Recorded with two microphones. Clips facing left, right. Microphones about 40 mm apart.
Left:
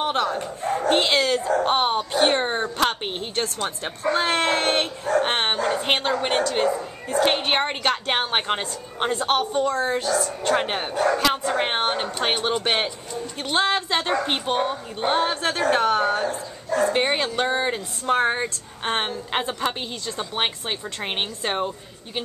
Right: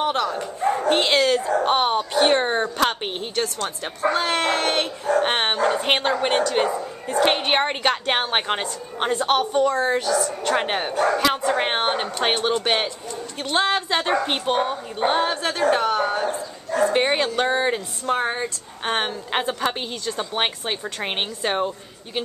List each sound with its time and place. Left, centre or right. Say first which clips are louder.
0.0 s speech: right 1 dB; centre
0.8 s a woman's voice: even; centre
3.5 s speech: even; centre
5.2 s a woman's voice: right 2 dB; centre
15.4 s a woman's voice: even; centre
16.9 s a woman's voice: right 2 dB; centre
18.0 s speech: left 3 dB; centre
18.9 s a woman's voice: right 1 dB; centre